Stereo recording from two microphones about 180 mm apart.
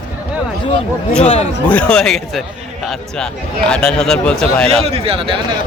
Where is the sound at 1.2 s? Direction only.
35° left (ahead or behind).